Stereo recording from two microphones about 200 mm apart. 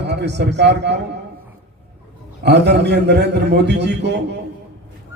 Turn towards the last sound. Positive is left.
turn(degrees=-60)  # may be behind; listen again after turning